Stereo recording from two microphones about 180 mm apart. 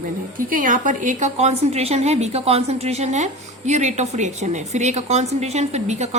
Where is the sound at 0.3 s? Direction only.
50° right (ahead or behind).